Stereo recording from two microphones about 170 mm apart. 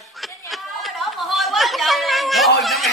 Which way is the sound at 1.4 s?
Centre (ahead or behind).